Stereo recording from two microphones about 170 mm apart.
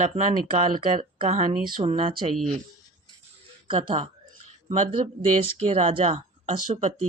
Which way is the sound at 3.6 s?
30° right (ahead or behind).